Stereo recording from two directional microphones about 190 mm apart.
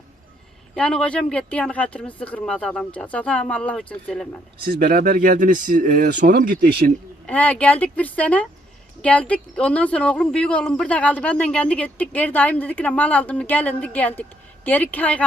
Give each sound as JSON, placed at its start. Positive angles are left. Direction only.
{"t": 0.8, "sound": "speech", "side_deg": 5}
{"t": 4.6, "sound": "speech", "side_deg": -50}
{"t": 7.3, "sound": "speech", "side_deg": 5}